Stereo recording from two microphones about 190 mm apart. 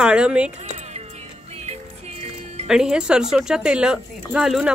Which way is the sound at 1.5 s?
35° right (ahead or behind).